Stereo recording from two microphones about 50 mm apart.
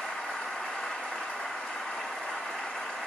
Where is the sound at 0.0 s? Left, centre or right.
Centre.